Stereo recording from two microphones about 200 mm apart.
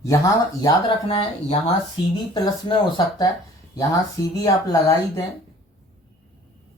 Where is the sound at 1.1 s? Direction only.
30° left (ahead or behind).